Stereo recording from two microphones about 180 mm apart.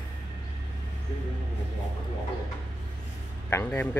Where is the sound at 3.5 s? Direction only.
10° left (ahead or behind).